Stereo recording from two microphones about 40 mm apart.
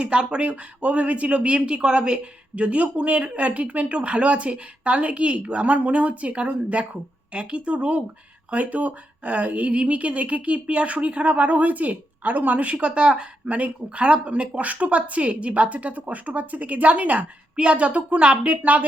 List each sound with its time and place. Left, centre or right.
0.0 s speech: right
12.7 s speech: right
17.6 s speech: right
18.6 s speech: right